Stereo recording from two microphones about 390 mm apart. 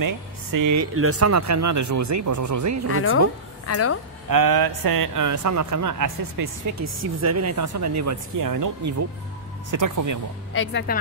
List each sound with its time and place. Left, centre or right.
0.0 s speech: right
0.9 s speech: right
2.9 s speech: left
4.3 s speech: right
10.5 s speech: left